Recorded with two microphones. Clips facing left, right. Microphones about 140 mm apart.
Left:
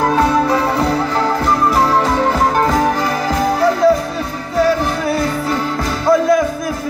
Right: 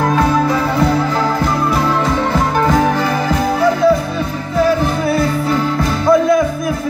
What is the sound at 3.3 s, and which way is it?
Music, 35° left (ahead or behind).